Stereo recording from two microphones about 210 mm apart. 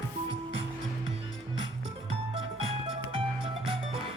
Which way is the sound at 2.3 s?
25° right (ahead or behind).